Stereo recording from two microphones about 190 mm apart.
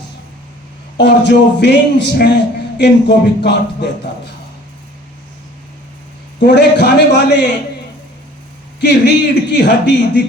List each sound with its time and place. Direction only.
0.9 s a man's voice: 60° left (ahead or behind)
6.4 s a man's voice: 65° left (ahead or behind)
8.8 s a man's voice: 60° left (ahead or behind)